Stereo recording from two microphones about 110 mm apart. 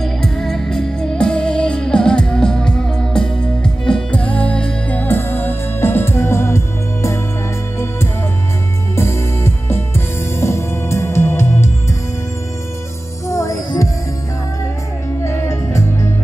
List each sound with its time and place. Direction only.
0.0 s music: 5° left (ahead or behind); by 7.2 s 25° left (ahead or behind)
8.9 s music: 20° left (ahead or behind)
13.3 s music: 25° left (ahead or behind)
15.2 s music: 25° left (ahead or behind)